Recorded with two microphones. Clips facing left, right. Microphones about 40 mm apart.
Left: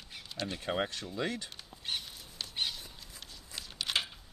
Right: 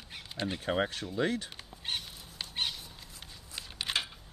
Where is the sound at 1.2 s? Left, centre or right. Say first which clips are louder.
Right 5 dB; right.